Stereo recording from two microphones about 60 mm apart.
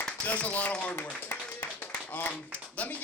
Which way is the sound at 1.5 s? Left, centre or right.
Left.